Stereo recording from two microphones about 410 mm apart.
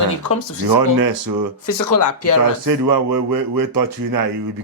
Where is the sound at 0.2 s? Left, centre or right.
Left.